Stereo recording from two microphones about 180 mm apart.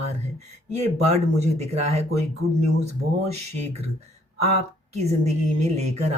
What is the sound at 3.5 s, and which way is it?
A woman's voice, 35° right (ahead or behind).